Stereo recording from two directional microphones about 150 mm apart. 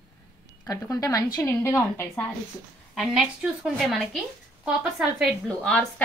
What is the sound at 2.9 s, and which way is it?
A woman's voice, centre (ahead or behind).